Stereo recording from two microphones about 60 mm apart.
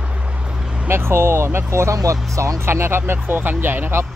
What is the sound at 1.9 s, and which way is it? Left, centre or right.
Speech, right.